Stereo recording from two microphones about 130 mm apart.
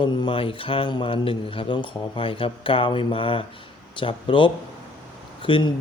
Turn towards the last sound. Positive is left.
turn(degrees=40)  # may be behind; listen again after turning